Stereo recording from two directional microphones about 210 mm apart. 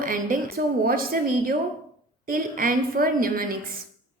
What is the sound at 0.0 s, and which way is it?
A woman's voice, 40° right (ahead or behind).